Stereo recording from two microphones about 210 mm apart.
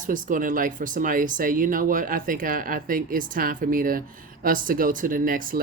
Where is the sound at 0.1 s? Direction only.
40° right (ahead or behind).